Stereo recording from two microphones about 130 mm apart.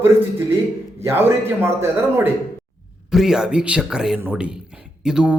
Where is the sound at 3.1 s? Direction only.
5° right (ahead or behind).